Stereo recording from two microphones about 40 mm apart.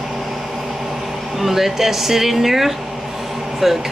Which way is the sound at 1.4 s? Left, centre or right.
Centre.